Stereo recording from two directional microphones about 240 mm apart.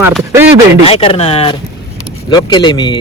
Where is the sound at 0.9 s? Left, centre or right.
Left.